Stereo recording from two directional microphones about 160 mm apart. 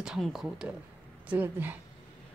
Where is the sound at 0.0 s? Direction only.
5° right (ahead or behind).